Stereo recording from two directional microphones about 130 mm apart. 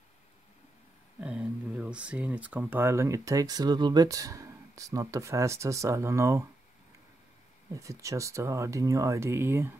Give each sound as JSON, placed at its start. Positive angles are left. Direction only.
{"t": 1.2, "sound": "speech", "side_deg": -5}
{"t": 7.7, "sound": "speech", "side_deg": -25}